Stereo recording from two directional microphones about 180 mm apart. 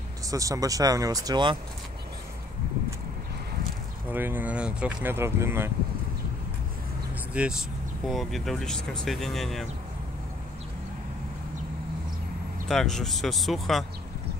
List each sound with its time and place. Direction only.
0.3 s speech: 20° right (ahead or behind)
4.1 s speech: 10° right (ahead or behind)
7.3 s speech: 5° right (ahead or behind)
12.6 s speech: centre (ahead or behind)